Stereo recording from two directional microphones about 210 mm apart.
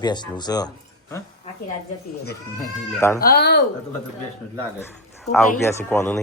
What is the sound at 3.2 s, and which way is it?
Speech, 50° left (ahead or behind).